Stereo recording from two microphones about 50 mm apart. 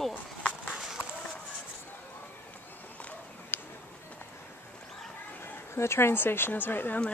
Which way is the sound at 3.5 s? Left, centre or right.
Left.